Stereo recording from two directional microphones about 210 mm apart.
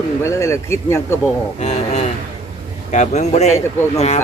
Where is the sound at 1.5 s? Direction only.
30° left (ahead or behind).